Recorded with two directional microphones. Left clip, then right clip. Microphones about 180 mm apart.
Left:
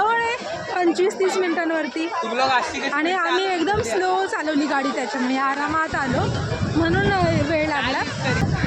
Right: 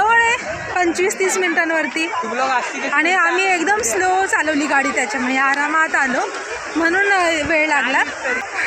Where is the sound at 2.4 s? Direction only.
25° right (ahead or behind).